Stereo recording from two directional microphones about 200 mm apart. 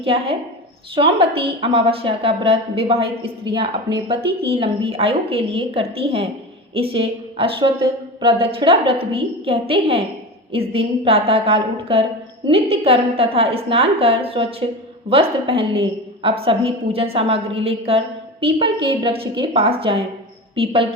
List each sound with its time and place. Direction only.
0.0 s a woman's voice: 30° right (ahead or behind)